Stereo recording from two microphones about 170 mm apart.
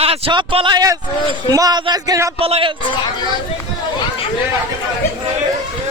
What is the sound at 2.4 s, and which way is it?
Speech, 35° right (ahead or behind).